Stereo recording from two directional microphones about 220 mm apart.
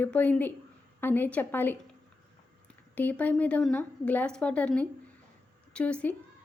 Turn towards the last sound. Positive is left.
turn(degrees=5)  # may be behind; listen again after turning